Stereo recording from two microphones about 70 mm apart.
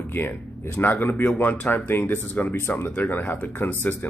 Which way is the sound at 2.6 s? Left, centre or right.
Left.